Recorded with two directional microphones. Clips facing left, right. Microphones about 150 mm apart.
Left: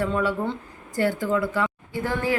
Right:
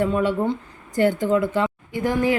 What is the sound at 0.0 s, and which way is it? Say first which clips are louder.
A woman's voice: right 4 dB; 20° right (ahead or behind).